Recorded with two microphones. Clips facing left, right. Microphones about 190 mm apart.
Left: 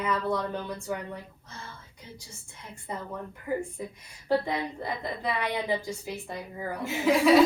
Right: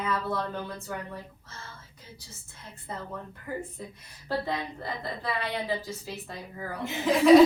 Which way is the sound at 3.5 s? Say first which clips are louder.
Left 5 dB; 15° left (ahead or behind).